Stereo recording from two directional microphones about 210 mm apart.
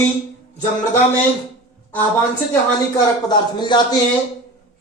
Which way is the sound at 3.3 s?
20° left (ahead or behind).